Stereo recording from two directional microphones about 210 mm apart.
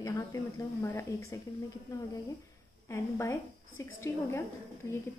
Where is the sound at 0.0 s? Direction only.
15° left (ahead or behind).